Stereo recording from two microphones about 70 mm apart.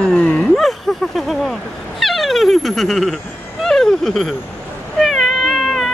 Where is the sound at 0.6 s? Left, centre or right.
Centre.